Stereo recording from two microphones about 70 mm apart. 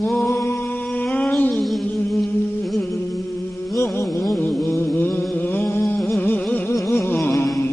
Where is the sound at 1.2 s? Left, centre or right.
Centre.